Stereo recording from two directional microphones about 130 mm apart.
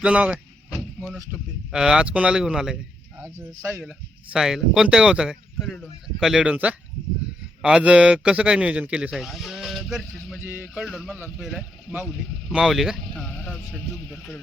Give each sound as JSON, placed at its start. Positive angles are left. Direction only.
{"t": 0.0, "sound": "speech", "side_deg": -5}
{"t": 3.2, "sound": "speech", "side_deg": -20}
{"t": 3.8, "sound": "a man's voice", "side_deg": -5}
{"t": 10.4, "sound": "a man's voice", "side_deg": -15}